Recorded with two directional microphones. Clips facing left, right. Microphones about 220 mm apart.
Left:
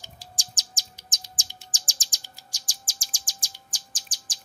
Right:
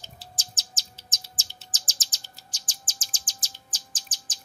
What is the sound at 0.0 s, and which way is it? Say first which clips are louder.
Chirp: even; 15° left (ahead or behind).